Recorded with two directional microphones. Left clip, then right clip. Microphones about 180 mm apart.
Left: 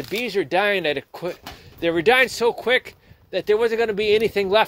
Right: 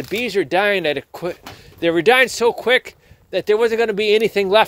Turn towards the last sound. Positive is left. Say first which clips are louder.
# right 3 dB
turn(degrees=-35)  # may be behind; listen again after turning